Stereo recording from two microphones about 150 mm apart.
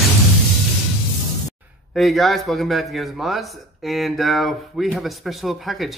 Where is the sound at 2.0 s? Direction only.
Centre (ahead or behind).